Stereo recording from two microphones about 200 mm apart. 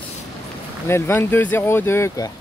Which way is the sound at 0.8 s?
10° left (ahead or behind).